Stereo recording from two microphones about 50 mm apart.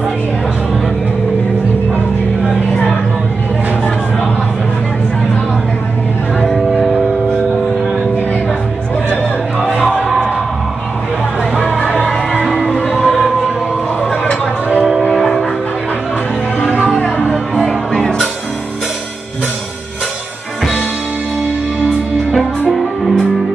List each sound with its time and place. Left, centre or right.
9.6 s music: centre
11.6 s music: left
12.3 s music: centre
12.8 s music: centre
15.1 s music: centre
16.8 s music: left
17.6 s music: centre